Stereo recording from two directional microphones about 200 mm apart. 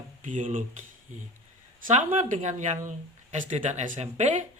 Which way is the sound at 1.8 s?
40° right (ahead or behind).